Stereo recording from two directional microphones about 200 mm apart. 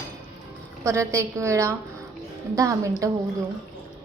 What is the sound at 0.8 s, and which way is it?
A woman's voice, 15° right (ahead or behind).